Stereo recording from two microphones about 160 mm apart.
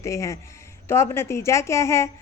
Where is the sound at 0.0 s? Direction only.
20° left (ahead or behind).